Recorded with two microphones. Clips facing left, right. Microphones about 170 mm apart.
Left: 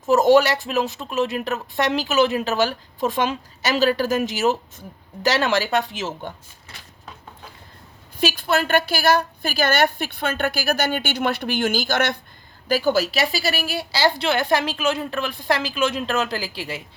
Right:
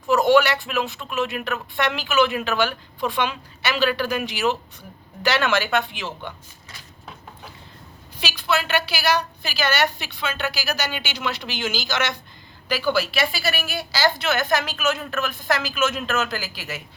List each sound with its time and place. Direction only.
0.1 s speech: 40° left (ahead or behind)
8.2 s a woman's voice: 50° left (ahead or behind)
12.6 s a woman's voice: 45° left (ahead or behind); by 16.8 s 30° left (ahead or behind)